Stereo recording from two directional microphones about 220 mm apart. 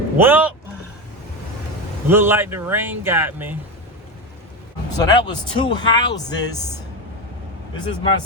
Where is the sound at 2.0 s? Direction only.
10° right (ahead or behind).